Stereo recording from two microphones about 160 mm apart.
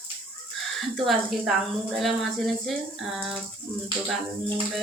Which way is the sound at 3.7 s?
15° right (ahead or behind).